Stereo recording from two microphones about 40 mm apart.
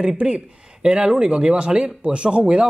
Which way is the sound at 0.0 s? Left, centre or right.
Right.